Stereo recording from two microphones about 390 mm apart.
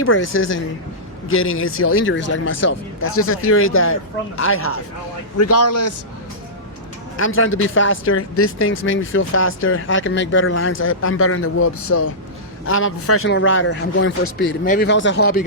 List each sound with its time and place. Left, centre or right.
0.0 s a man's voice: left
7.2 s a man's voice: left